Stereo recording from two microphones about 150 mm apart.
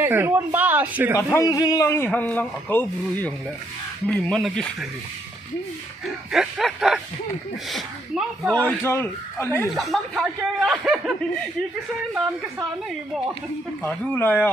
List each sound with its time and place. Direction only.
0.0 s speech: 15° right (ahead or behind)
1.3 s a man's voice: 20° left (ahead or behind)
2.0 s speech: 10° left (ahead or behind)
6.3 s speech: centre (ahead or behind)
8.5 s speech: 10° left (ahead or behind)
9.7 s speech: centre (ahead or behind)
13.8 s speech: 10° left (ahead or behind)